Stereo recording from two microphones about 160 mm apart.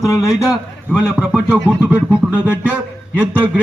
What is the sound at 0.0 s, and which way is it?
Speech, 20° left (ahead or behind).